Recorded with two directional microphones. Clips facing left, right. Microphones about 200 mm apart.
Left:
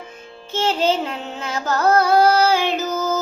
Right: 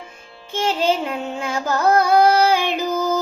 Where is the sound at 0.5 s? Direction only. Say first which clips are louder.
Even; 15° right (ahead or behind).